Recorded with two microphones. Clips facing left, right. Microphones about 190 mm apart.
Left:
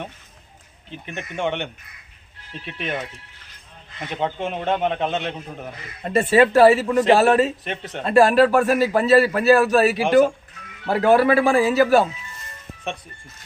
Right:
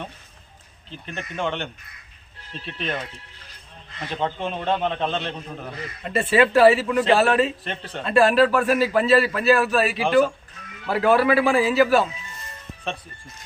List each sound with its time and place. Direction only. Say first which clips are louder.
0.9 s a man's voice: left 1 dB; 15° left (ahead or behind)
4.1 s a man's voice: left 1 dB; 15° left (ahead or behind)
6.1 s speech: left 3 dB; 40° left (ahead or behind)
7.6 s a man's voice: left 2 dB; 15° left (ahead or behind)
8.0 s a man's voice: left 2 dB; 40° left (ahead or behind)